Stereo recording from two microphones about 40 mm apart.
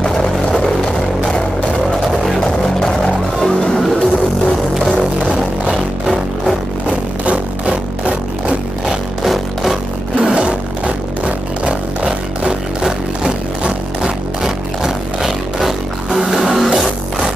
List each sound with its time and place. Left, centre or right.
0.0 s vehicle: centre
3.3 s music: centre
3.8 s music: centre
4.8 s music: centre
9.2 s music: centre
10.1 s a sound: right
11.2 s music: right; by 17.3 s centre